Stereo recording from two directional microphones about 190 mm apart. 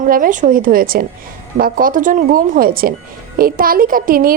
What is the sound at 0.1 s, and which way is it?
A child's voice, 45° right (ahead or behind).